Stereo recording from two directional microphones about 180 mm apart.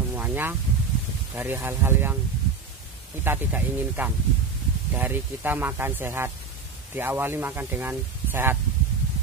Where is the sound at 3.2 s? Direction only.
10° right (ahead or behind).